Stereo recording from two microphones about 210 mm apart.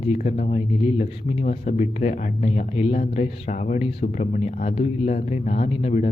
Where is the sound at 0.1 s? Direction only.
35° left (ahead or behind).